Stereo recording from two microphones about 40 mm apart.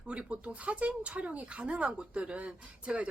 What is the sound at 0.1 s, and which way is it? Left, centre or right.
A woman's voice, right.